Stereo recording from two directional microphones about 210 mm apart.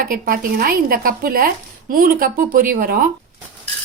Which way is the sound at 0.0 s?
45° right (ahead or behind).